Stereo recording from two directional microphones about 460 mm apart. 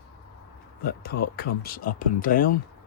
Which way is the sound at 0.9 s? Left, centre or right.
Centre.